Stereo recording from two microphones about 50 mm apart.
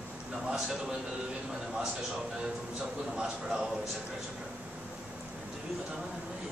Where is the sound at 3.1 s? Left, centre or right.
Centre.